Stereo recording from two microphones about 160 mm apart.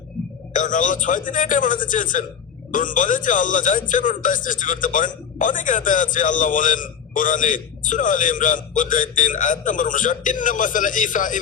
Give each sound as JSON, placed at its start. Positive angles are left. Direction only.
{"t": 0.5, "sound": "speech", "side_deg": 55}